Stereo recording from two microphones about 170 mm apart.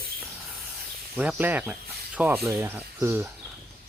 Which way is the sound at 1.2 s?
10° right (ahead or behind).